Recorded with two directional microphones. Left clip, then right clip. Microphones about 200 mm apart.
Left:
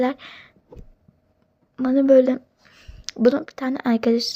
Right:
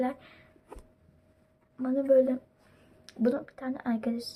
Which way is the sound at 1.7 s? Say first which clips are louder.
Left 9 dB; 25° left (ahead or behind).